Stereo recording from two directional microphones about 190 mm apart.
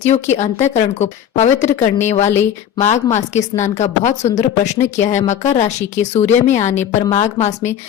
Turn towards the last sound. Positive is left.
turn(degrees=35)  # may be behind; listen again after turning